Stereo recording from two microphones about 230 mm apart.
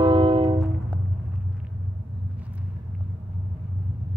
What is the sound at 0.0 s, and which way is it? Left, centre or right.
Music, right.